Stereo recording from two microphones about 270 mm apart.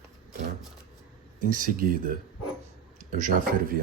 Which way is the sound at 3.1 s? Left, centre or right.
Right.